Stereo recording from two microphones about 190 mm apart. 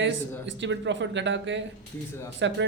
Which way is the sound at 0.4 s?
70° right (ahead or behind).